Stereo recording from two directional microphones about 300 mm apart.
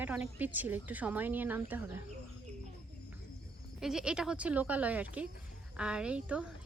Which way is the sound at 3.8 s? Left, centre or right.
Centre.